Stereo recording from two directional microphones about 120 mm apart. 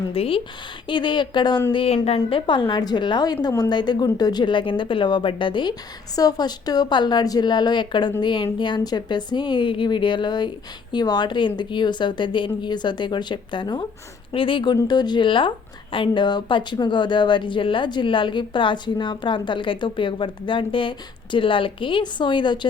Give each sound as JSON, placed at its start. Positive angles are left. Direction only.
{"t": 0.1, "sound": "speech", "side_deg": 50}
{"t": 1.7, "sound": "a woman's voice", "side_deg": 50}
{"t": 2.5, "sound": "speech", "side_deg": 40}